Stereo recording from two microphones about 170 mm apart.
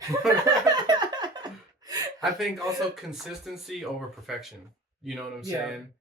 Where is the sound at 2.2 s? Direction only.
Centre (ahead or behind).